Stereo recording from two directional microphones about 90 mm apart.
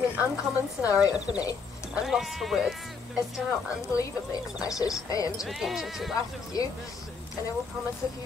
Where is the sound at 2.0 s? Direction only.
5° right (ahead or behind).